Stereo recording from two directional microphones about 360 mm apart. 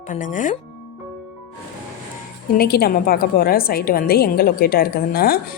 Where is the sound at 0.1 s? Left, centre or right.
Left.